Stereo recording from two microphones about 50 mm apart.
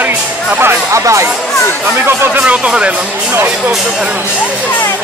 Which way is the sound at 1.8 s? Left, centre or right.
Right.